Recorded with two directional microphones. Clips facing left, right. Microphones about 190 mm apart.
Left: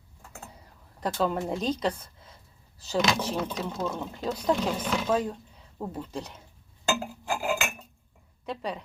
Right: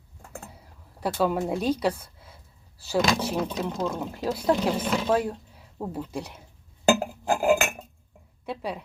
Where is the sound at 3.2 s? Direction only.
10° right (ahead or behind).